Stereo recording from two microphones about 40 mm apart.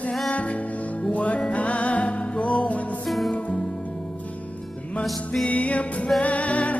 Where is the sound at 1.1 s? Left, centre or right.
Left.